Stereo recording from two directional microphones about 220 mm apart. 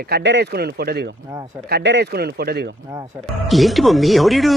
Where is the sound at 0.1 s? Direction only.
50° right (ahead or behind).